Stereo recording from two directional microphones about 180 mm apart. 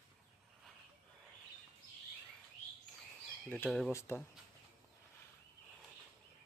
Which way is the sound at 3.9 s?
15° left (ahead or behind).